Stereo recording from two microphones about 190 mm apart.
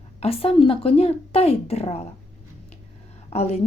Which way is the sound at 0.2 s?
30° left (ahead or behind).